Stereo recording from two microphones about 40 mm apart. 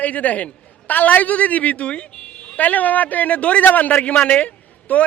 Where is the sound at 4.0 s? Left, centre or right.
Left.